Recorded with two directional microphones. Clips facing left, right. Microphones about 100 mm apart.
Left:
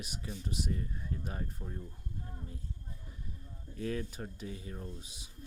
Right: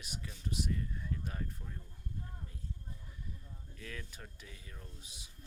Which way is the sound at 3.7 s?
30° left (ahead or behind).